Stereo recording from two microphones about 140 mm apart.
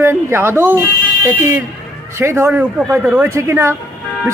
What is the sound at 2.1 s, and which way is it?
Speech, 20° right (ahead or behind).